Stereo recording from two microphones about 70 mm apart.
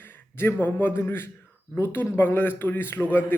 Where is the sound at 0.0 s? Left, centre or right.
Left.